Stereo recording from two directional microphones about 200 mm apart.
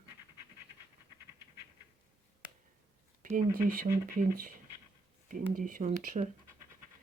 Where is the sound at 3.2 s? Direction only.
45° right (ahead or behind).